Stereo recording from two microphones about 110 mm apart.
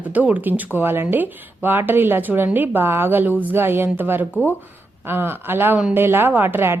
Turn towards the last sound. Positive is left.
turn(degrees=-20)  # may be behind; listen again after turning